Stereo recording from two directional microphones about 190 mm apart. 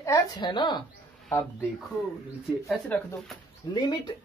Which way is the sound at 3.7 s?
25° left (ahead or behind).